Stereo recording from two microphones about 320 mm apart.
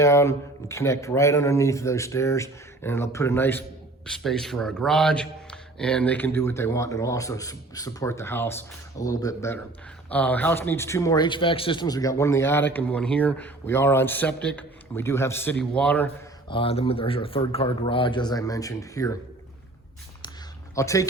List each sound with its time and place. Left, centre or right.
0.0 s a man's voice: centre
16.5 s a man's voice: centre
20.7 s a man's voice: centre